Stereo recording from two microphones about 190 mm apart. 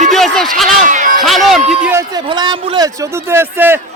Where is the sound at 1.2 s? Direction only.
Centre (ahead or behind).